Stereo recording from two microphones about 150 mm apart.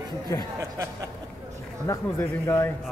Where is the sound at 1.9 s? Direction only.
15° left (ahead or behind).